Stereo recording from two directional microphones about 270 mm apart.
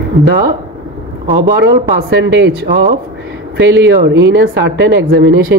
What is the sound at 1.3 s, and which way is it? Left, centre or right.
A woman's voice, right.